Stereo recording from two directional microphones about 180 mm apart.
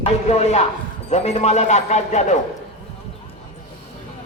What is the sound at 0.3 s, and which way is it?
A man's voice, 40° left (ahead or behind).